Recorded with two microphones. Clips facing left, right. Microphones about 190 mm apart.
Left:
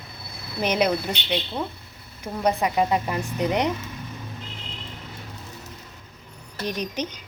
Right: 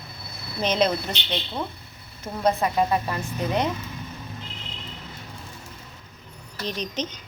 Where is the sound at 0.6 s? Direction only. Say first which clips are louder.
Even; 10° left (ahead or behind).